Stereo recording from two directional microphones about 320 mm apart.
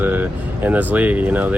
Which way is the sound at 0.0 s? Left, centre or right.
Centre.